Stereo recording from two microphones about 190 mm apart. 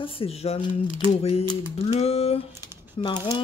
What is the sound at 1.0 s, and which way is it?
Speech, 35° left (ahead or behind).